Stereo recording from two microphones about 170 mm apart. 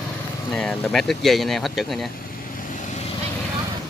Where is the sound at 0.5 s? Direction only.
Centre (ahead or behind).